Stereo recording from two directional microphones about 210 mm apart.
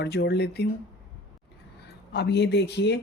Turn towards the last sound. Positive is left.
turn(degrees=55)  # may be behind; listen again after turning